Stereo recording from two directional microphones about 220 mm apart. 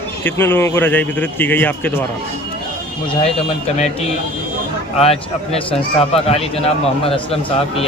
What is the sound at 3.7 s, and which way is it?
Speech, 30° left (ahead or behind).